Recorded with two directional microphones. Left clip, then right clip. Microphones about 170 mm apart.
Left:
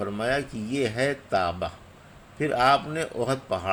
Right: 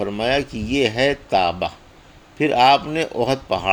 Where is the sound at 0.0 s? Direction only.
30° right (ahead or behind).